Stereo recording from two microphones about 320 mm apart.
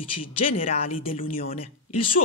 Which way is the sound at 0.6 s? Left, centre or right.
Centre.